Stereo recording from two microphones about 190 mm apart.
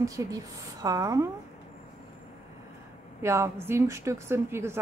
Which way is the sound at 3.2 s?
15° right (ahead or behind).